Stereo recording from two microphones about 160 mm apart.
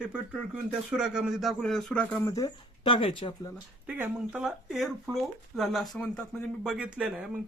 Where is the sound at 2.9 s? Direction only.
35° left (ahead or behind).